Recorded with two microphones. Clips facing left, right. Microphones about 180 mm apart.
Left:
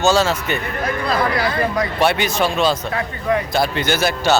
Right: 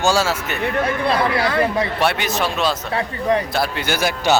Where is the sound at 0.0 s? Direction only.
10° right (ahead or behind).